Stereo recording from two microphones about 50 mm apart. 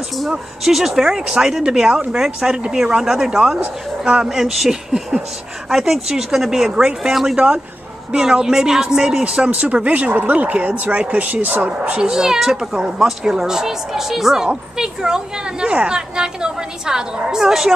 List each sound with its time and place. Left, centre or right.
0.3 s speech: centre
7.3 s speech: right